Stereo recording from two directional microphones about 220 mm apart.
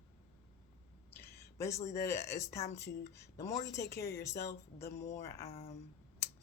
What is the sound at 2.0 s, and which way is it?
Speech, 15° left (ahead or behind).